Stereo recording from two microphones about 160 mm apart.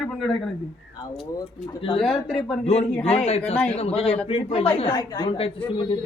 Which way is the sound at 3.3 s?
40° left (ahead or behind).